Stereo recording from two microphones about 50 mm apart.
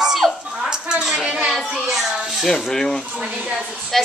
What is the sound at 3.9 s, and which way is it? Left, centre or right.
Speech, centre.